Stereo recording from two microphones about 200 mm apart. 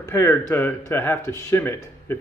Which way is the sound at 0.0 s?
10° left (ahead or behind).